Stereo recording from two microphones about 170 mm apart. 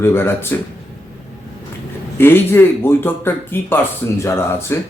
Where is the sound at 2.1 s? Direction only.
15° left (ahead or behind).